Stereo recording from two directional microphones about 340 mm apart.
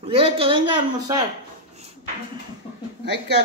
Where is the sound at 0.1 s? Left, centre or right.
Centre.